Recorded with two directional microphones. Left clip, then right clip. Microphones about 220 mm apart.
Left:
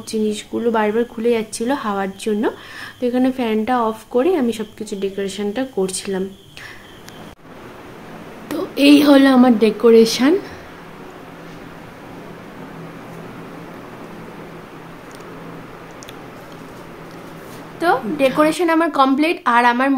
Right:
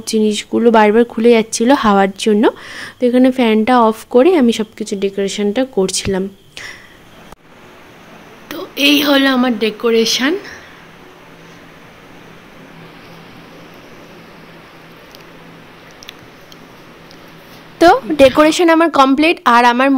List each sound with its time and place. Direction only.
0.0 s speech: 40° right (ahead or behind)
8.5 s a woman's voice: 5° left (ahead or behind)
17.7 s speech: 45° right (ahead or behind)